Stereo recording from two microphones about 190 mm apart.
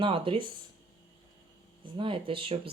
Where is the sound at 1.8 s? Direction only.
25° right (ahead or behind).